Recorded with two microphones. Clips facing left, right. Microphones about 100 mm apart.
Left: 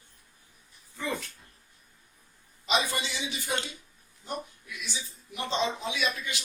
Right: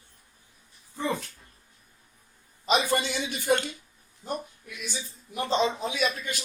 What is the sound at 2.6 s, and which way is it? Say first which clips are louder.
Speech: right 4 dB; 45° right (ahead or behind).